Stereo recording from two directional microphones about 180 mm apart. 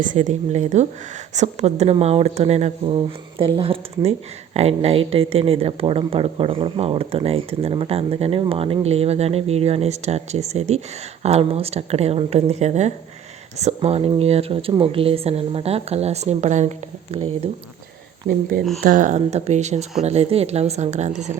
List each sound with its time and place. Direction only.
0.0 s speech: 45° right (ahead or behind)
18.8 s speech: 45° right (ahead or behind)